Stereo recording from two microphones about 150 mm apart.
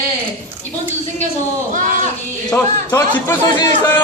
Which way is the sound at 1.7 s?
60° right (ahead or behind).